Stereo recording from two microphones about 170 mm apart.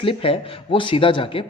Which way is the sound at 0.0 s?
35° left (ahead or behind).